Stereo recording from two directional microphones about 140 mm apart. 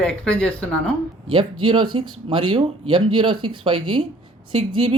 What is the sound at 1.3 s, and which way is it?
Speech, 35° right (ahead or behind).